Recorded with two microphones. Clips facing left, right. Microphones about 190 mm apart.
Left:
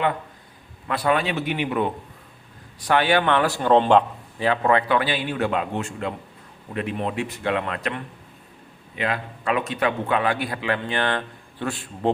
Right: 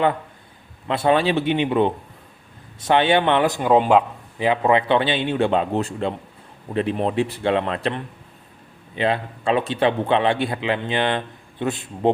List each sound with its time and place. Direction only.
0.9 s speech: 25° right (ahead or behind)
3.7 s a man's voice: 5° right (ahead or behind)
4.4 s speech: 20° right (ahead or behind)